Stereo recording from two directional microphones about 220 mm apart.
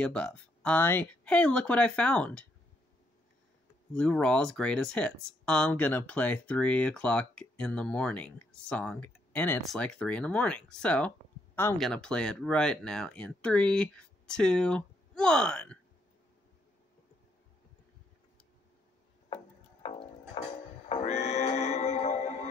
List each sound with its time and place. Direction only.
0.0 s speech: 5° left (ahead or behind)
3.9 s speech: 5° left (ahead or behind)
19.2 s music: 25° left (ahead or behind)